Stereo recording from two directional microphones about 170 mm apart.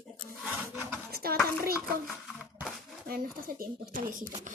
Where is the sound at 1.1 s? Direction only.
65° right (ahead or behind).